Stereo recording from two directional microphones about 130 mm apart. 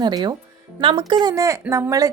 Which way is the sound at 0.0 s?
30° right (ahead or behind).